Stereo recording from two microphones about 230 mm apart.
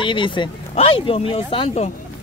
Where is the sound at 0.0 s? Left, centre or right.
Left.